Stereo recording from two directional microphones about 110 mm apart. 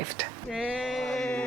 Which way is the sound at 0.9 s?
5° left (ahead or behind).